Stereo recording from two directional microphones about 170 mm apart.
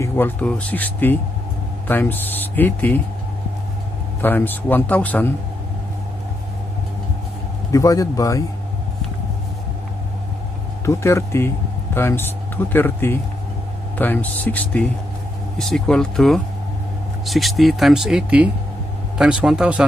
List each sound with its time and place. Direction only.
0.0 s speech: 10° left (ahead or behind)
4.2 s speech: 10° left (ahead or behind)
7.7 s speech: 20° left (ahead or behind)
10.9 s speech: 15° left (ahead or behind); by 19.8 s 5° right (ahead or behind)